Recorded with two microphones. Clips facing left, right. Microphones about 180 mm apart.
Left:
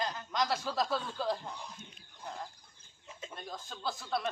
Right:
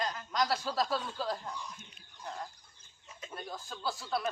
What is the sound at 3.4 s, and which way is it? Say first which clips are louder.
Speech: right 2 dB; centre (ahead or behind).